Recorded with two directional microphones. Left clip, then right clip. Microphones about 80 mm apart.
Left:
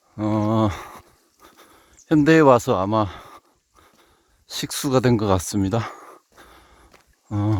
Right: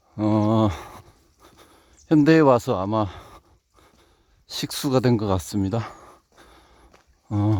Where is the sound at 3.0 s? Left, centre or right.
Centre.